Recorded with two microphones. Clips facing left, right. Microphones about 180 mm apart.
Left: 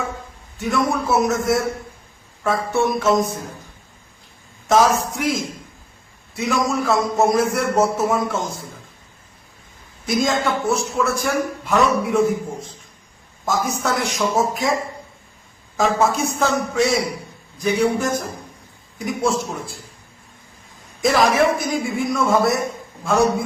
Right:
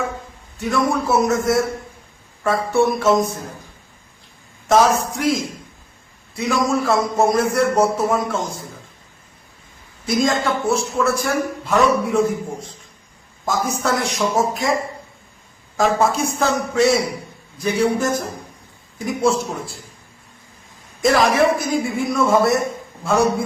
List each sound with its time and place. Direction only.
0.6 s a man's voice: centre (ahead or behind)
2.8 s a man's voice: centre (ahead or behind)
4.7 s a man's voice: centre (ahead or behind)
10.1 s a man's voice: centre (ahead or behind)
15.8 s a man's voice: centre (ahead or behind)
21.0 s a man's voice: centre (ahead or behind)